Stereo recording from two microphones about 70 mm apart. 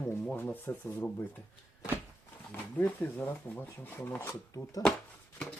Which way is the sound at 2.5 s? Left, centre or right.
Left.